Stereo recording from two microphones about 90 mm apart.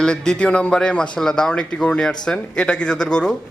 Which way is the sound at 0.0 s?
10° left (ahead or behind).